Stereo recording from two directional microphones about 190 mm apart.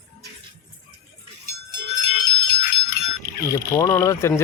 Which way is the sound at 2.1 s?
55° left (ahead or behind).